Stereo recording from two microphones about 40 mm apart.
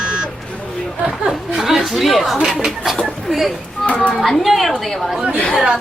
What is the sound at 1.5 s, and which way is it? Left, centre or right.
Speech, centre.